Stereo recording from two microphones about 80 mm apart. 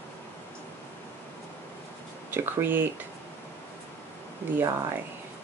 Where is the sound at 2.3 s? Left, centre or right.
Right.